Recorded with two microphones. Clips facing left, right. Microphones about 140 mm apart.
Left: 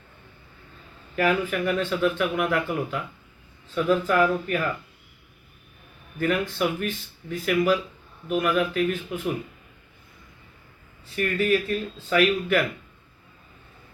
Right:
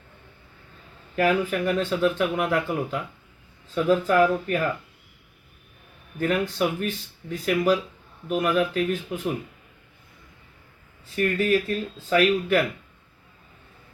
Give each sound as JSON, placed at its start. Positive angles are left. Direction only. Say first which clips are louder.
{"t": 1.1, "sound": "speech", "louder": "right 1 dB", "side_deg": -35}
{"t": 6.1, "sound": "speech", "louder": "right 1 dB", "side_deg": -35}
{"t": 11.1, "sound": "speech", "louder": "right 1 dB", "side_deg": -35}